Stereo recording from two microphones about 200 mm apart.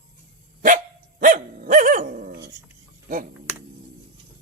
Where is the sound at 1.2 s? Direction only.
40° right (ahead or behind).